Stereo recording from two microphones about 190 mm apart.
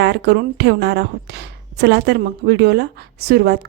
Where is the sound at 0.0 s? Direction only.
65° right (ahead or behind).